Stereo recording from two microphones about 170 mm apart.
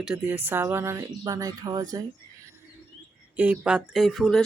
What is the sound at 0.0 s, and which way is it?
Speech, 10° right (ahead or behind).